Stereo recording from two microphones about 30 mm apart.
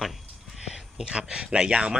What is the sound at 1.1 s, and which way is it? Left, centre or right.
Speech, right.